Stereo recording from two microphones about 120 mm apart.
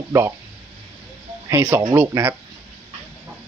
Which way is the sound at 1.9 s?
20° right (ahead or behind).